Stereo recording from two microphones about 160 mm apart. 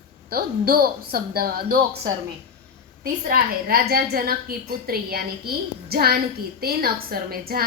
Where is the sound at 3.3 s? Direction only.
70° right (ahead or behind).